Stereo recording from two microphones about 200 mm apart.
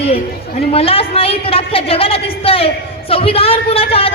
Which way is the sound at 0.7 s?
30° left (ahead or behind).